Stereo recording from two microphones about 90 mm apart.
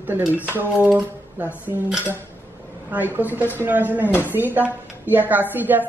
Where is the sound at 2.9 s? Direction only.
20° right (ahead or behind).